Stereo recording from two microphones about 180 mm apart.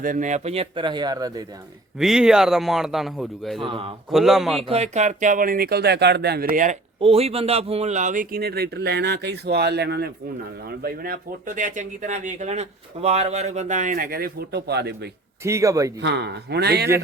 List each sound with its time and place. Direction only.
0.0 s speech: 45° right (ahead or behind); by 1.5 s 20° right (ahead or behind)
2.0 s speech: 5° right (ahead or behind)
3.6 s speech: 30° right (ahead or behind)
4.1 s speech: centre (ahead or behind)
4.6 s a man's voice: 35° right (ahead or behind); by 6.7 s 50° right (ahead or behind)
7.0 s a man's voice: 35° right (ahead or behind); by 10.1 s 70° right (ahead or behind)
10.7 s speech: 55° right (ahead or behind)
15.4 s a man's voice: 15° right (ahead or behind)
16.0 s a man's voice: 75° right (ahead or behind)